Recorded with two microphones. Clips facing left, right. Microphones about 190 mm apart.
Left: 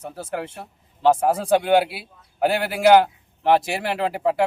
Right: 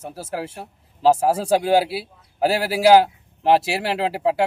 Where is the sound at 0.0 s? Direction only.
30° right (ahead or behind).